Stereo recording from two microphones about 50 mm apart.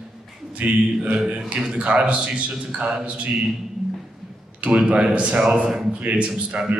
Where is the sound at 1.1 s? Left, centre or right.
Centre.